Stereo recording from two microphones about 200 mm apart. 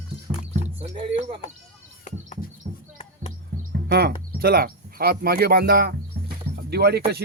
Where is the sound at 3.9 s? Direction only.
50° right (ahead or behind).